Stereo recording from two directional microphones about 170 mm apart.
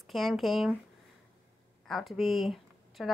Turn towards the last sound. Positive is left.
turn(degrees=0)  # may be behind; listen again after turning